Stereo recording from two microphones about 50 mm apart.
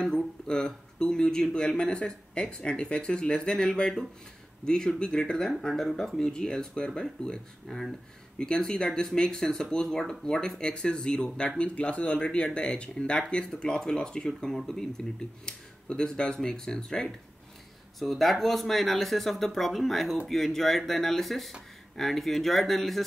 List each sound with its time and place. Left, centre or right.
0.0 s speech: centre
7.6 s speech: centre
8.4 s speech: centre
17.9 s speech: centre